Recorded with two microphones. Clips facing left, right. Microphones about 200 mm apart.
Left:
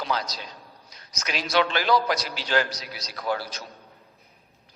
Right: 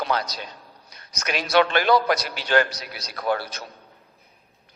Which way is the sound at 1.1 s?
60° right (ahead or behind).